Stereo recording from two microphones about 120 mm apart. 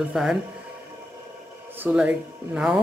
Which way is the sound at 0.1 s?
5° right (ahead or behind).